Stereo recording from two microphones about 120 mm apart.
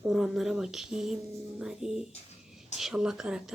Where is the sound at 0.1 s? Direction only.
5° right (ahead or behind).